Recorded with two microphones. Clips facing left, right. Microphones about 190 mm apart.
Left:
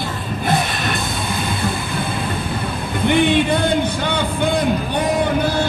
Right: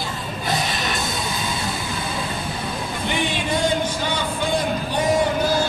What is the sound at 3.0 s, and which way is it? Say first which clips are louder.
Music: left 10 dB; 60° left (ahead or behind).